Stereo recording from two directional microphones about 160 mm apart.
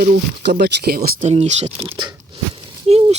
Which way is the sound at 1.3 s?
40° right (ahead or behind).